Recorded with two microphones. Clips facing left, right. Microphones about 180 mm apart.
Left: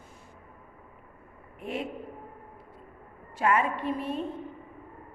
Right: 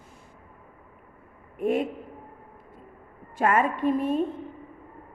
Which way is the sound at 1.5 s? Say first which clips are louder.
Right 10 dB; 50° right (ahead or behind).